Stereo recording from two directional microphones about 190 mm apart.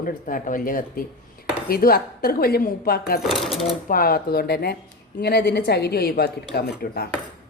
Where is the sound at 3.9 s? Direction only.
50° left (ahead or behind).